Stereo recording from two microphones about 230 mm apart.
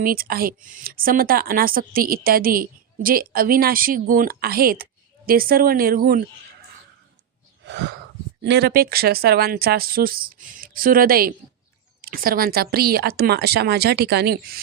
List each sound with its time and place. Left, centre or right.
0.0 s speech: right
7.6 s wheeze: right
8.4 s a woman's voice: right